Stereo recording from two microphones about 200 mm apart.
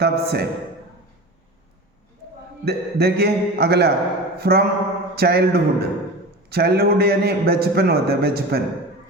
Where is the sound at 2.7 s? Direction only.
55° right (ahead or behind).